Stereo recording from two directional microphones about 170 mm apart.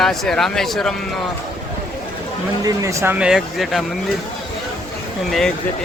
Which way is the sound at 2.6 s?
20° right (ahead or behind).